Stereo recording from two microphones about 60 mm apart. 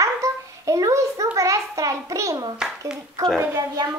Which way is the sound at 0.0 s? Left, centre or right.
Right.